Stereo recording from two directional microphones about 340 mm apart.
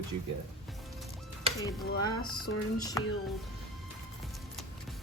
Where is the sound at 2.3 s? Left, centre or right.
Left.